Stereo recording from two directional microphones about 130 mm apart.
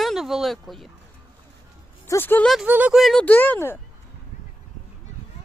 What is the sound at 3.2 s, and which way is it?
Speech, 15° left (ahead or behind).